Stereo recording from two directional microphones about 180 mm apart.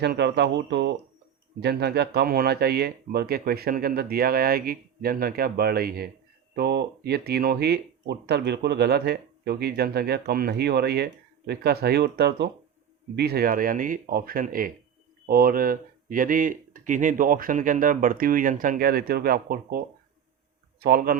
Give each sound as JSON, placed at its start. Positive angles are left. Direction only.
{"t": 0.0, "sound": "speech", "side_deg": -70}
{"t": 1.6, "sound": "speech", "side_deg": -65}